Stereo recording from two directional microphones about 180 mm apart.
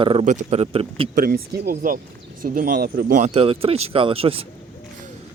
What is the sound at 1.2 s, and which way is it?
Speech, 55° right (ahead or behind).